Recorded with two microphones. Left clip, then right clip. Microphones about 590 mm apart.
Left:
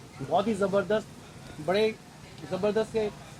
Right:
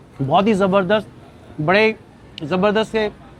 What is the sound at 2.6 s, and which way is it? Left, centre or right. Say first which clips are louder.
Speech: right 9 dB; right.